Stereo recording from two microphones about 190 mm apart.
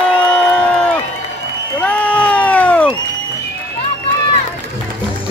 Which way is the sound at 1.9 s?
5° left (ahead or behind).